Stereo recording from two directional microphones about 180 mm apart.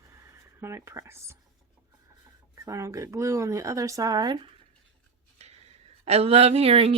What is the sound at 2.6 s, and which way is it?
Speech, 15° right (ahead or behind).